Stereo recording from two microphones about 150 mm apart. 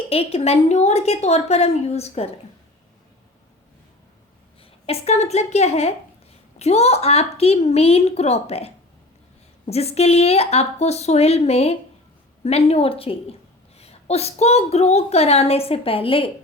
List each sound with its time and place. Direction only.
0.1 s a woman's voice: 40° left (ahead or behind)
4.9 s a woman's voice: 45° left (ahead or behind)